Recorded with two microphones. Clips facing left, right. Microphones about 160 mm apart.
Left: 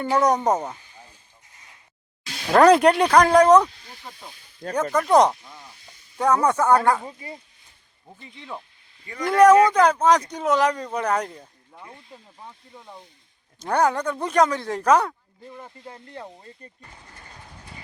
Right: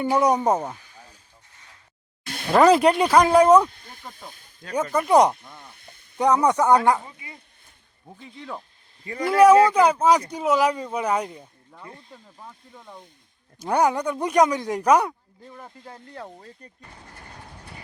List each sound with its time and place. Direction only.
0.0 s speech: 10° right (ahead or behind)
2.5 s speech: centre (ahead or behind)
3.7 s snake: 50° right (ahead or behind)
4.1 s speech: 50° right (ahead or behind)
4.7 s speech: 10° right (ahead or behind)
5.4 s snake: 55° right (ahead or behind)
6.1 s speech: 15° right (ahead or behind)
8.2 s speech: centre (ahead or behind)
13.6 s speech: 10° right (ahead or behind)
15.5 s speech: centre (ahead or behind)